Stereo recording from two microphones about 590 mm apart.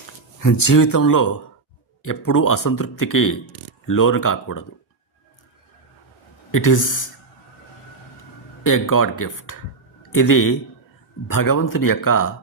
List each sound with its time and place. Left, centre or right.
0.3 s speech: left
6.5 s speech: left
8.6 s speech: left